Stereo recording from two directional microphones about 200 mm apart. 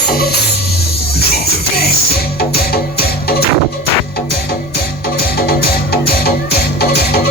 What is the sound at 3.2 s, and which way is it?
Music, 50° left (ahead or behind).